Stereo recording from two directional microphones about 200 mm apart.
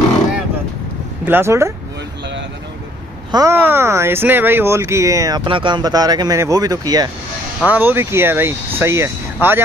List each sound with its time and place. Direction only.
1.2 s speech: 10° right (ahead or behind)
3.3 s speech: 15° right (ahead or behind)